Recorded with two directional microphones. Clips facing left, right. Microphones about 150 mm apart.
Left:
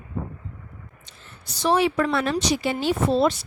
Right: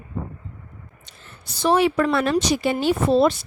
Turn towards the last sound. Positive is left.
turn(degrees=-55)  # may be behind; listen again after turning